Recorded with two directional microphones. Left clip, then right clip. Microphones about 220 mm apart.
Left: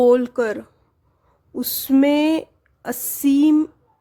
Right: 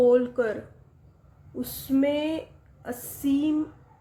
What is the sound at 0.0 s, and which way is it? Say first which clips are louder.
A woman's voice: left 5 dB; 45° left (ahead or behind).